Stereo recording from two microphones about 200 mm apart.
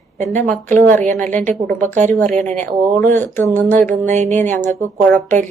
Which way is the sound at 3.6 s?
40° right (ahead or behind).